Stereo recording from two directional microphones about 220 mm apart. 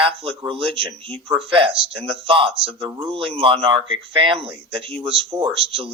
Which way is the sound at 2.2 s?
25° right (ahead or behind).